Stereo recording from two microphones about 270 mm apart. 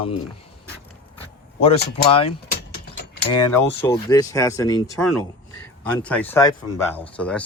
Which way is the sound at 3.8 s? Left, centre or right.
Centre.